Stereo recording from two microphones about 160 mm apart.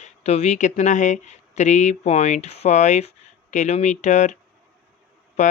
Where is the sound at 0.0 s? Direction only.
40° left (ahead or behind).